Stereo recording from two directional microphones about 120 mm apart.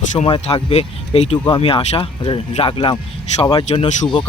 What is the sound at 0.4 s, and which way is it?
Speech, 60° left (ahead or behind).